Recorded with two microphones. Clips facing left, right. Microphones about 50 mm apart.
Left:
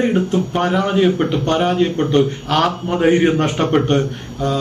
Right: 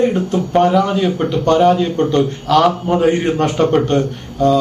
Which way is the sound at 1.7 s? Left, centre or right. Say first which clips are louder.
Even; centre.